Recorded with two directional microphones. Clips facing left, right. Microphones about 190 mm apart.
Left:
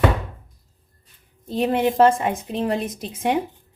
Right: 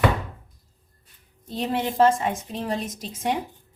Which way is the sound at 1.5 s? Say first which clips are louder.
Left 6 dB; 60° left (ahead or behind).